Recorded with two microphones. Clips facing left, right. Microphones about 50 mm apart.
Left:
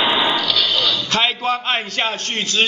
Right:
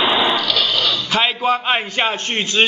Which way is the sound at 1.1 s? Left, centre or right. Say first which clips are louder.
Right 3 dB; centre.